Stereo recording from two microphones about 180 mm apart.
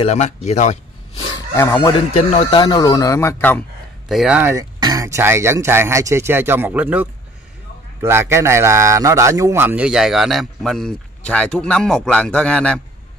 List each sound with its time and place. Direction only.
0.0 s speech: 35° left (ahead or behind)
1.5 s speech: 20° left (ahead or behind)
4.1 s speech: 5° right (ahead or behind)
4.7 s a man's voice: 20° right (ahead or behind); by 12.8 s 5° left (ahead or behind)